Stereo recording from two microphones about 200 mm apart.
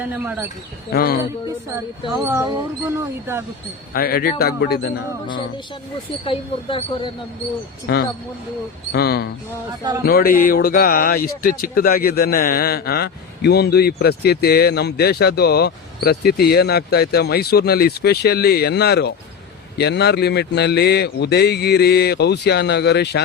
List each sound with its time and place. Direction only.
0.0 s speech: 10° right (ahead or behind)
0.9 s speech: 50° left (ahead or behind)
1.7 s speech: 15° right (ahead or behind)
3.9 s speech: 50° left (ahead or behind)
6.2 s speech: 25° left (ahead or behind)
7.9 s speech: 50° left (ahead or behind)